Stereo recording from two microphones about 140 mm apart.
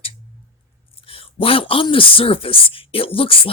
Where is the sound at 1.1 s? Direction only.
40° left (ahead or behind).